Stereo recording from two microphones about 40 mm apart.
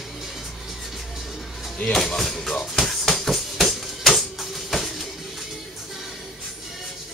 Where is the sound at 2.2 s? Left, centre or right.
Centre.